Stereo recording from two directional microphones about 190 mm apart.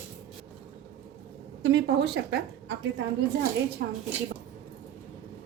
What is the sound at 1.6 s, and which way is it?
A woman's voice, 65° right (ahead or behind).